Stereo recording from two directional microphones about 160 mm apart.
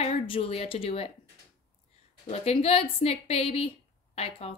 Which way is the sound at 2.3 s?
40° left (ahead or behind).